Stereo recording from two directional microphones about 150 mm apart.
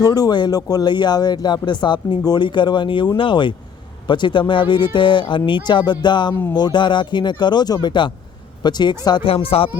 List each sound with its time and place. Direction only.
0.0 s speech: 25° left (ahead or behind)